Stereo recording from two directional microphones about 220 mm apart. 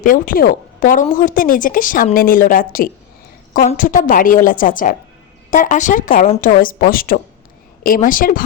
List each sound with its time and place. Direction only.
0.0 s a woman's voice: 40° left (ahead or behind)